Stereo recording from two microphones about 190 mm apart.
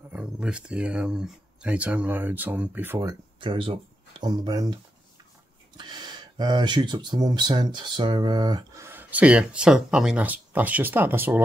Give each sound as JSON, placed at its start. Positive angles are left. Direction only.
{"t": 0.1, "sound": "speech", "side_deg": -5}
{"t": 5.8, "sound": "speech", "side_deg": -20}